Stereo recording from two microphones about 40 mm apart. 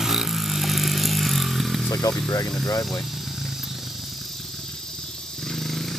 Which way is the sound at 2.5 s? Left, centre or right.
Centre.